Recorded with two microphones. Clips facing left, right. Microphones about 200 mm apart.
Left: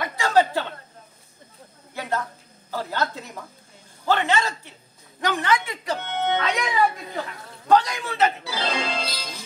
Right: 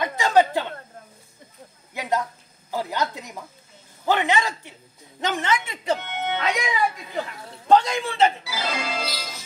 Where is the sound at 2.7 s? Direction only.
15° right (ahead or behind).